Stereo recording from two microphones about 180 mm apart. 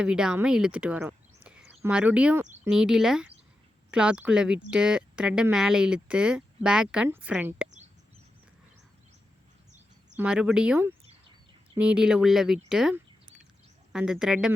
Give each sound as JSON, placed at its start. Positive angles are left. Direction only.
{"t": 0.0, "sound": "speech", "side_deg": -5}
{"t": 10.2, "sound": "speech", "side_deg": -5}